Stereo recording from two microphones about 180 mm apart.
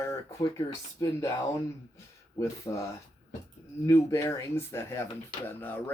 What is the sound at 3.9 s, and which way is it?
Speech, 15° left (ahead or behind).